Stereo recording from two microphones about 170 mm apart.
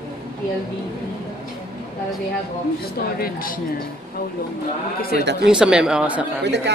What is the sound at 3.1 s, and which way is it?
Speech, 60° left (ahead or behind).